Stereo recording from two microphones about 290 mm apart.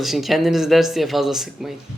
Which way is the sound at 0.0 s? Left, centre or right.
Centre.